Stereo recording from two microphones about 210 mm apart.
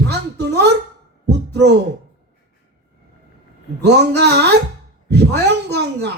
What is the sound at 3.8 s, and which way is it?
A man's voice, 50° right (ahead or behind).